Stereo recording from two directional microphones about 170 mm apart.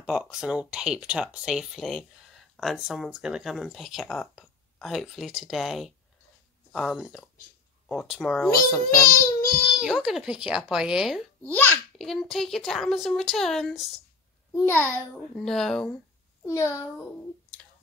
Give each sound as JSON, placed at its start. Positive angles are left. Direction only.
{"t": 0.0, "sound": "speech", "side_deg": 0}
{"t": 14.5, "sound": "a child's voice", "side_deg": 15}
{"t": 15.3, "sound": "speech", "side_deg": 5}
{"t": 16.4, "sound": "a child's voice", "side_deg": 15}